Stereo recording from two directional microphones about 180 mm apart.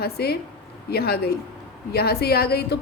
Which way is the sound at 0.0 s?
60° left (ahead or behind).